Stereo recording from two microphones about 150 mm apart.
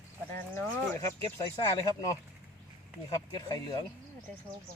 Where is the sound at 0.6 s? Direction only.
20° left (ahead or behind).